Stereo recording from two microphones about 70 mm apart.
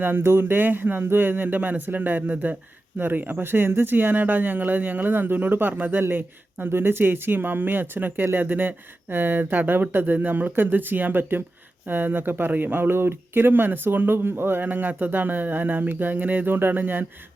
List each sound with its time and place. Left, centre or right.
0.0 s speech: right